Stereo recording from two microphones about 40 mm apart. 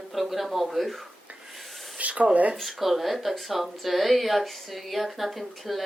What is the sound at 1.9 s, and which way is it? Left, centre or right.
Speech, right.